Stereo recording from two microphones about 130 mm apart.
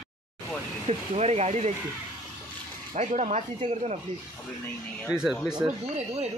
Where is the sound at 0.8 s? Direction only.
55° right (ahead or behind).